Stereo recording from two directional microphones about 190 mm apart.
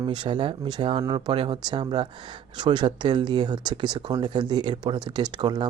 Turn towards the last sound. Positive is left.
turn(degrees=-25)  # may be behind; listen again after turning